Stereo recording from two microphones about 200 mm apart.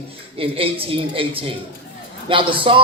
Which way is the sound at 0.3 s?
25° right (ahead or behind).